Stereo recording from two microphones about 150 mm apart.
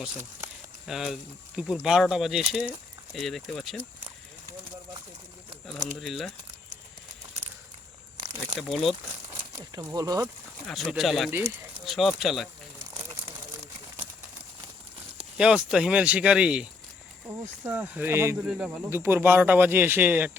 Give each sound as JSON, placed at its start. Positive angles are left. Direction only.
{"t": 0.9, "sound": "speech", "side_deg": 0}
{"t": 6.0, "sound": "speech", "side_deg": 0}
{"t": 8.5, "sound": "speech", "side_deg": 0}
{"t": 9.7, "sound": "speech", "side_deg": -25}
{"t": 10.7, "sound": "speech", "side_deg": 0}
{"t": 11.3, "sound": "speech", "side_deg": -15}
{"t": 11.9, "sound": "speech", "side_deg": 0}
{"t": 15.4, "sound": "speech", "side_deg": -5}
{"t": 18.4, "sound": "speech", "side_deg": -5}